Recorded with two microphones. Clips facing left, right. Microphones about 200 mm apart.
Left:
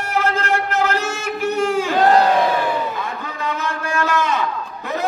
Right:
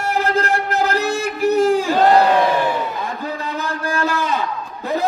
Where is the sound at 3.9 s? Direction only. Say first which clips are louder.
Left 2 dB; 35° right (ahead or behind).